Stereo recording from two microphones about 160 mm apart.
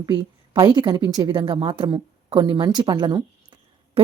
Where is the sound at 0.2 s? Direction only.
25° right (ahead or behind).